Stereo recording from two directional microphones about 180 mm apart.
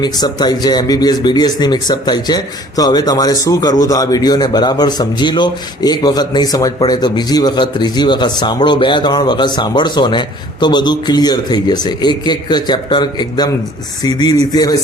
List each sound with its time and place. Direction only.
0.0 s speech: 25° left (ahead or behind)